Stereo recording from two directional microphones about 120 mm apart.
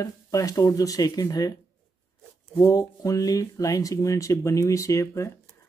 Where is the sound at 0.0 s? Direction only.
30° left (ahead or behind).